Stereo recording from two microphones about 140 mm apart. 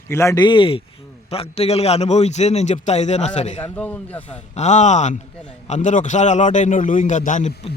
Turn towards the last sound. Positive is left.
turn(degrees=60)  # may be behind; listen again after turning